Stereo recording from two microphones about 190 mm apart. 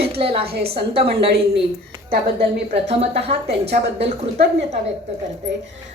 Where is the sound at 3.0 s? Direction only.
35° right (ahead or behind).